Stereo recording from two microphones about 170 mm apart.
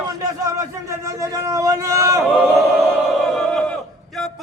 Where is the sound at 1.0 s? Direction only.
20° right (ahead or behind).